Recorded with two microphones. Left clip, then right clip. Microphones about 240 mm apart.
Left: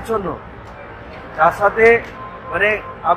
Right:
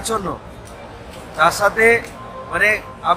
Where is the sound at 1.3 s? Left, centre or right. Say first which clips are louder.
Left 1 dB; centre.